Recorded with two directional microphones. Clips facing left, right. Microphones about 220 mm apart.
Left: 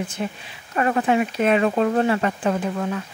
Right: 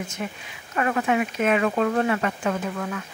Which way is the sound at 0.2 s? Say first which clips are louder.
Left 4 dB; 30° left (ahead or behind).